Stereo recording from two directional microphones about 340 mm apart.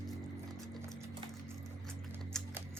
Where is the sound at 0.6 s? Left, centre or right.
Centre.